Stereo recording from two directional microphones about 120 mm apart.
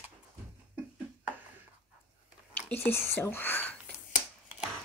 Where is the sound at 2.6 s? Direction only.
15° left (ahead or behind).